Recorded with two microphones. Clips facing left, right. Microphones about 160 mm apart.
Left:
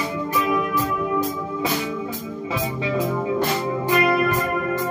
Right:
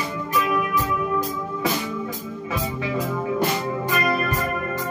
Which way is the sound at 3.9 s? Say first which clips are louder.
Left 5 dB; 25° left (ahead or behind).